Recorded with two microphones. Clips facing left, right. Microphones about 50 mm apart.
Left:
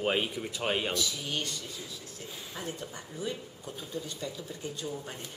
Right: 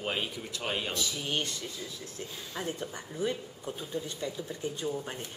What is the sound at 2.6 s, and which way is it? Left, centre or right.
A woman's voice, right.